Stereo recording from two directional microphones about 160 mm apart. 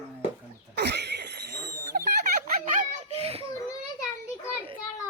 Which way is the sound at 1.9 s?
80° right.